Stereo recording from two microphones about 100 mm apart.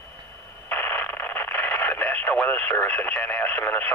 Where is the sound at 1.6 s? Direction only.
15° left (ahead or behind).